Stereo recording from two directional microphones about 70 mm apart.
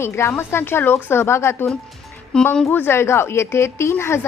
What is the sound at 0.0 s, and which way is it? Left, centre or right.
Speech, left.